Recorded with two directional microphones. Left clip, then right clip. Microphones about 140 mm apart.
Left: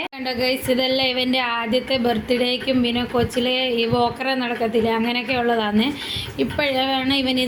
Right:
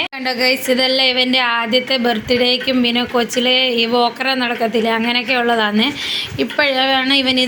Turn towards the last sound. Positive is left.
turn(degrees=-5)  # may be behind; listen again after turning